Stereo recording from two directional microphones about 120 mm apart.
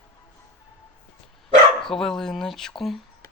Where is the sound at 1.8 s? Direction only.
5° left (ahead or behind).